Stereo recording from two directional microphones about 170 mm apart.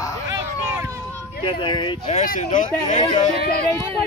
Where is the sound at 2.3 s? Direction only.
50° left (ahead or behind).